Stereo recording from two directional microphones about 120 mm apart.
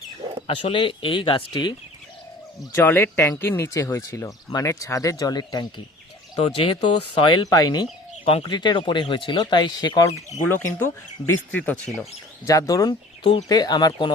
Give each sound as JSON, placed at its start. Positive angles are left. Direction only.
{"t": 0.4, "sound": "speech", "side_deg": 45}
{"t": 2.7, "sound": "speech", "side_deg": 15}
{"t": 6.4, "sound": "speech", "side_deg": 45}
{"t": 8.2, "sound": "speech", "side_deg": 50}
{"t": 10.3, "sound": "speech", "side_deg": 20}
{"t": 12.5, "sound": "speech", "side_deg": 30}
{"t": 13.2, "sound": "speech", "side_deg": 40}